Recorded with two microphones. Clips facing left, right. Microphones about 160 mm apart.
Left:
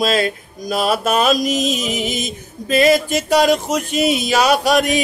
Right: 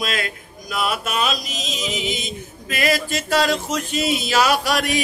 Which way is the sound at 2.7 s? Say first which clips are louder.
Left 8 dB; 25° left (ahead or behind).